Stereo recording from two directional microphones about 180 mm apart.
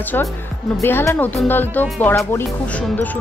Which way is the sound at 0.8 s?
10° left (ahead or behind).